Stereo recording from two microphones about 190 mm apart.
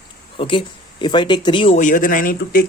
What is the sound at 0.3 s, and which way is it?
Speech, 25° left (ahead or behind).